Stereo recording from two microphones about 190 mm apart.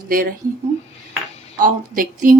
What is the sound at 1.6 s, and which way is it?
Speech, 45° right (ahead or behind).